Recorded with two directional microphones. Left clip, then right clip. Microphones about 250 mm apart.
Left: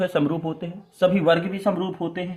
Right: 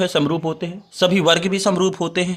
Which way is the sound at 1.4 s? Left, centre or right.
Right.